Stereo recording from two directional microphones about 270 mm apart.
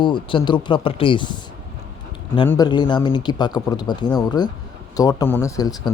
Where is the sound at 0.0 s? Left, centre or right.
Centre.